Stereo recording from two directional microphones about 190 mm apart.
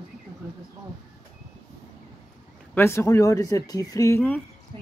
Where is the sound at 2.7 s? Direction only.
15° left (ahead or behind).